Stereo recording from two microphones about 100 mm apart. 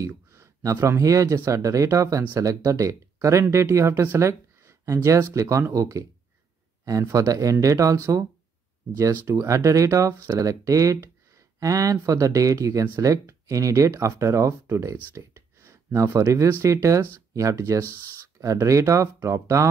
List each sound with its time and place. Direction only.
0.0 s speech: 30° right (ahead or behind)
15.1 s a sound: 25° right (ahead or behind)
16.6 s speech: 30° right (ahead or behind)